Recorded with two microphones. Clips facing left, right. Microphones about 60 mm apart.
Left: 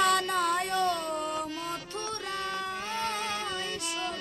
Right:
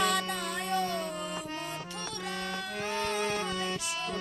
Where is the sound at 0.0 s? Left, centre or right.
Left.